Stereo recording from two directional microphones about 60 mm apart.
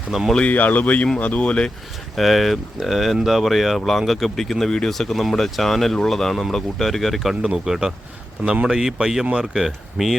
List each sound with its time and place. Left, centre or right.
0.3 s speech: left
2.1 s speech: centre